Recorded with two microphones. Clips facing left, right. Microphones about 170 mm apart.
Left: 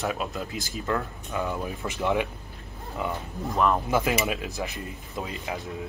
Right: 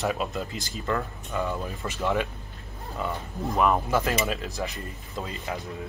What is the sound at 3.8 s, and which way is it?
Speech, 10° left (ahead or behind).